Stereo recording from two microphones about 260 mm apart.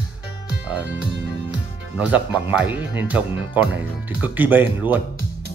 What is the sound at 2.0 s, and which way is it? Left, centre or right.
Speech, centre.